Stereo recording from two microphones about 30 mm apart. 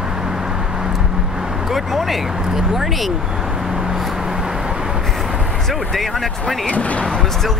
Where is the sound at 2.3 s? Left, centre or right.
Centre.